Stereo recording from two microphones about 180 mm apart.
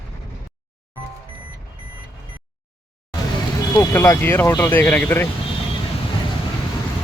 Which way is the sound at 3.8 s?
15° left (ahead or behind).